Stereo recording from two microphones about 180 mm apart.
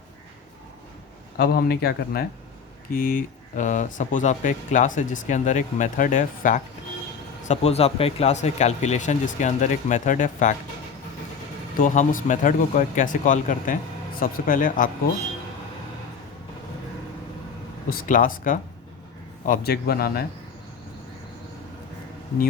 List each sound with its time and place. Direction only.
1.4 s speech: 60° left (ahead or behind); by 10.5 s 45° left (ahead or behind)
11.8 s speech: 45° left (ahead or behind)
17.8 s speech: 50° left (ahead or behind)
19.5 s speech: 60° left (ahead or behind)